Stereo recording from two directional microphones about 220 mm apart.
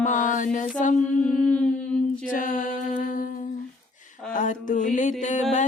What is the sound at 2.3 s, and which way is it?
Mantra, 35° left (ahead or behind).